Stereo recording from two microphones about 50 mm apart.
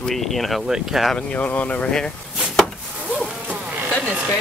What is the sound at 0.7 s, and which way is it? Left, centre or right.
Speech, centre.